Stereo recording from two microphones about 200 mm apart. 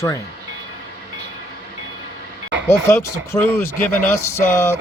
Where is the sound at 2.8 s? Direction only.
15° left (ahead or behind).